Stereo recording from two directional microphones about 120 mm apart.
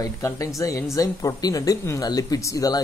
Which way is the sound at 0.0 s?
30° left (ahead or behind).